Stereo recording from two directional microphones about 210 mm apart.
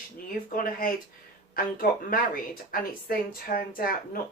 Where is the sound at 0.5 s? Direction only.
40° left (ahead or behind).